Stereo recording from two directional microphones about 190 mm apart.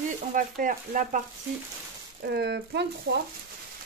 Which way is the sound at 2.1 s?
60° right (ahead or behind).